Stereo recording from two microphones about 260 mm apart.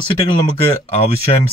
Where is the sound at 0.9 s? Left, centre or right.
Left.